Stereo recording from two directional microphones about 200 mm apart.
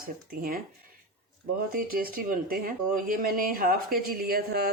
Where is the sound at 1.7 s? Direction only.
45° right (ahead or behind).